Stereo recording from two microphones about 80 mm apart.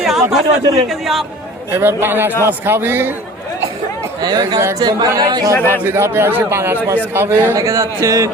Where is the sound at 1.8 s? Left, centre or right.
Right.